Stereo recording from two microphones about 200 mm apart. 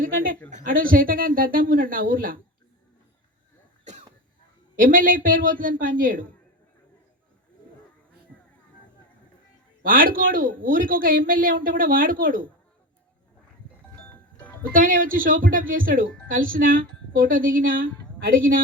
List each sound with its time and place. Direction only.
0.0 s a woman's voice: 45° right (ahead or behind)
4.8 s a woman's voice: 45° right (ahead or behind)
9.8 s a woman's voice: 45° right (ahead or behind)
14.1 s music: 5° left (ahead or behind)
14.7 s a woman's voice: 45° right (ahead or behind)